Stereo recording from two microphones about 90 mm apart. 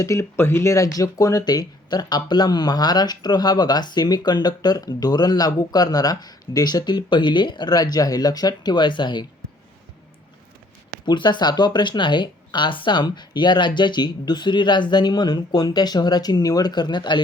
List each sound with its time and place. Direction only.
0.0 s speech: 35° left (ahead or behind); by 9.2 s 60° left (ahead or behind)
11.0 s speech: 60° left (ahead or behind)